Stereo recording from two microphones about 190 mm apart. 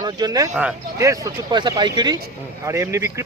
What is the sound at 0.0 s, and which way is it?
Speech, 20° right (ahead or behind).